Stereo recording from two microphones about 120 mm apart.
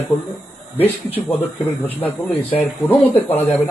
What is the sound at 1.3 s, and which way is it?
Speech, 15° left (ahead or behind).